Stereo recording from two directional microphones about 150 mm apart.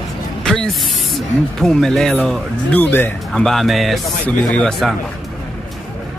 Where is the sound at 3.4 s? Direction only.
Centre (ahead or behind).